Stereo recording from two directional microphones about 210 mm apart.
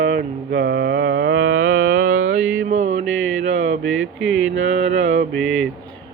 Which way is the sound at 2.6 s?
35° right (ahead or behind).